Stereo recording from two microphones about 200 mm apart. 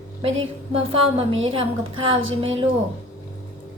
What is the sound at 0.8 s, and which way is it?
A woman's voice, 30° right (ahead or behind).